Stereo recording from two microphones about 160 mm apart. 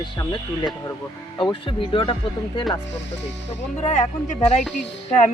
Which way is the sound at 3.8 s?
50° left (ahead or behind).